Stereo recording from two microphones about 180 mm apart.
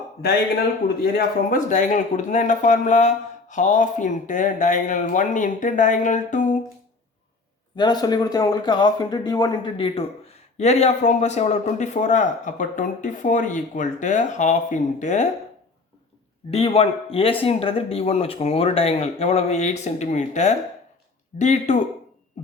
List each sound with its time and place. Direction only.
1.0 s a man's voice: 55° left (ahead or behind)
7.8 s speech: 25° left (ahead or behind); by 15.3 s 40° left (ahead or behind)
16.5 s speech: 35° left (ahead or behind)